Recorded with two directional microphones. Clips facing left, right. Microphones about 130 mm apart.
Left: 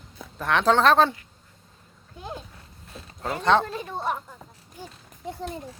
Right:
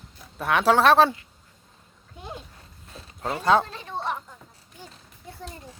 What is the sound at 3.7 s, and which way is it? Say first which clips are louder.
Speech: left 2 dB; 10° left (ahead or behind).